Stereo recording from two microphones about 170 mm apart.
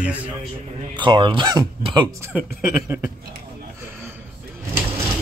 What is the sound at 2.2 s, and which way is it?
Speech, 10° right (ahead or behind).